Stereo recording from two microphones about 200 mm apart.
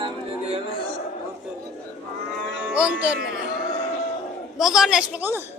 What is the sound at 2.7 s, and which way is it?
Speech, 5° right (ahead or behind).